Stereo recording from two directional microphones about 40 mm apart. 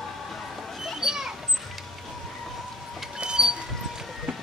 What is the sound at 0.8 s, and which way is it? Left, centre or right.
Children playing, centre.